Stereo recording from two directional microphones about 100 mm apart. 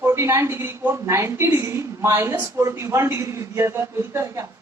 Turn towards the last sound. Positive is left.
turn(degrees=-25)  # may be behind; listen again after turning